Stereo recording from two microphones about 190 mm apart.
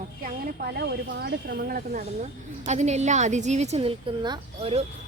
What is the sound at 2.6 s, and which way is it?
A woman's voice, 35° right (ahead or behind).